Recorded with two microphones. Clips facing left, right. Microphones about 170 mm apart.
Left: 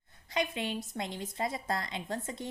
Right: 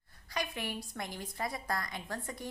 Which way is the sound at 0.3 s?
25° left (ahead or behind).